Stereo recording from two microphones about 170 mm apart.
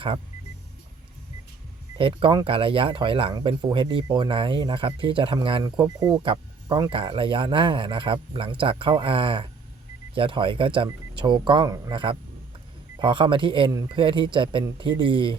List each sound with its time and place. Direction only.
2.0 s speech: 30° right (ahead or behind)